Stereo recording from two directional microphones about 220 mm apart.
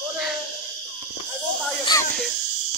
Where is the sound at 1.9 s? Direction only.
15° left (ahead or behind).